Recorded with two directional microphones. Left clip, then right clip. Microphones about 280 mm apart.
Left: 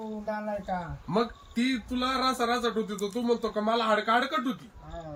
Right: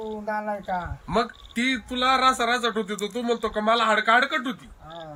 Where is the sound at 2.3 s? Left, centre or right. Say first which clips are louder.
Right 4 dB; centre.